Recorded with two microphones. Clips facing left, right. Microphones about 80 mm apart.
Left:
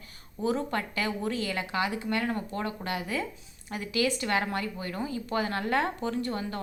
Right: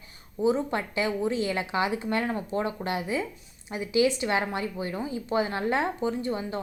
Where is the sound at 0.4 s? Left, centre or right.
Centre.